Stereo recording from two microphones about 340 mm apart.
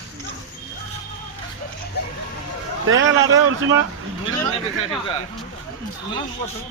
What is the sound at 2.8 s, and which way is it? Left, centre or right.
Speech, right.